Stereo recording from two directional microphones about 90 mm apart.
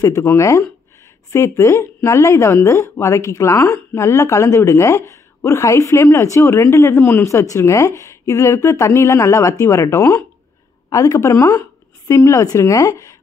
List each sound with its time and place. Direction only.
0.0 s speech: 35° left (ahead or behind)